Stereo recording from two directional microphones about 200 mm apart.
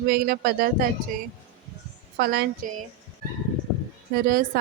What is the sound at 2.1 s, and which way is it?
Speech, 50° right (ahead or behind).